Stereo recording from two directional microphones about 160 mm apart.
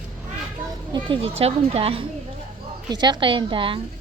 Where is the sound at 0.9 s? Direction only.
30° right (ahead or behind).